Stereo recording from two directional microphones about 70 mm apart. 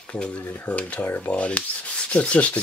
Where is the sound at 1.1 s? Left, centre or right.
Centre.